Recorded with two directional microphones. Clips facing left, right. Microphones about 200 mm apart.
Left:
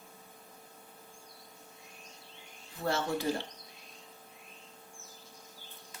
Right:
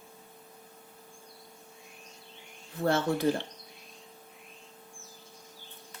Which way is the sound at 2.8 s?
55° right (ahead or behind).